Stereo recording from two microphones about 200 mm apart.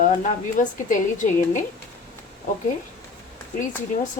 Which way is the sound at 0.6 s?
40° left (ahead or behind).